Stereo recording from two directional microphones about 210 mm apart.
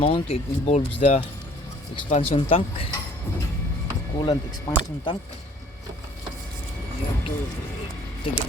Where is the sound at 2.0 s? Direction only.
25° left (ahead or behind).